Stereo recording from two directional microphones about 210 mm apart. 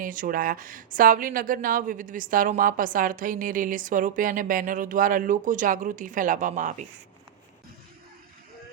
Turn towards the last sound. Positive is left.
turn(degrees=-35)  # may be behind; listen again after turning